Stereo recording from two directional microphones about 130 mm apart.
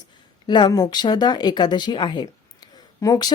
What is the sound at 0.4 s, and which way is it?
Speech, 35° left (ahead or behind).